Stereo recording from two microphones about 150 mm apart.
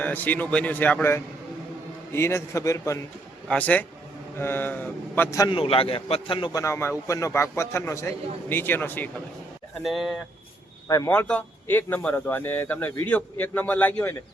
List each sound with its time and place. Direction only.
0.0 s a man's voice: 10° left (ahead or behind)
5.5 s a man's voice: 40° left (ahead or behind)
6.6 s a man's voice: 20° left (ahead or behind)
9.8 s speech: centre (ahead or behind)
10.8 s a man's voice: 20° left (ahead or behind)
11.1 s a man's voice: 10° left (ahead or behind)